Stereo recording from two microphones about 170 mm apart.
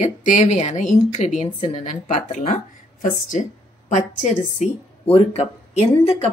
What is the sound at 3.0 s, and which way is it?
Speech, 50° left (ahead or behind).